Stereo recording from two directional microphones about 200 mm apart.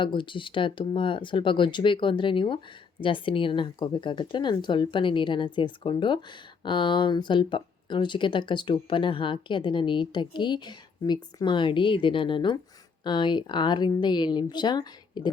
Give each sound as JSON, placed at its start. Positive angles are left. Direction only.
{"t": 0.0, "sound": "speech", "side_deg": 25}